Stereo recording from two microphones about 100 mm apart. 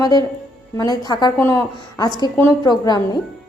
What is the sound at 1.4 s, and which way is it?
Speech, 30° left (ahead or behind).